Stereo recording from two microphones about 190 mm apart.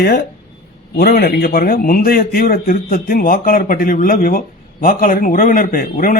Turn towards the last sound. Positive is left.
turn(degrees=50)  # may be behind; listen again after turning